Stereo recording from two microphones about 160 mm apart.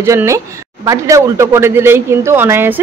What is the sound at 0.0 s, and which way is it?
A woman's voice, 15° right (ahead or behind).